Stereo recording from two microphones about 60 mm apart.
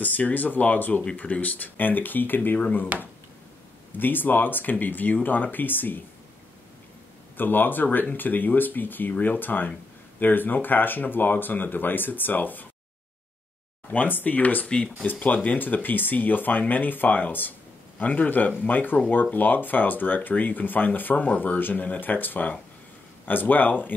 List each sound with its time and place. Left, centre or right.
0.0 s speech: left
2.9 s speech: right
3.9 s speech: left
7.3 s speech: left
13.8 s speech: left